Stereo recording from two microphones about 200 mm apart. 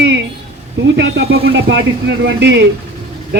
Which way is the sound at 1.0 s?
50° right (ahead or behind).